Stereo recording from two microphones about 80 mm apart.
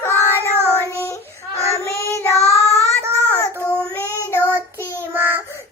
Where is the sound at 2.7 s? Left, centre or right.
Right.